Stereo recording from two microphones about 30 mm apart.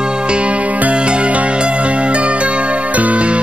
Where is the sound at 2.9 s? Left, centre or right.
Right.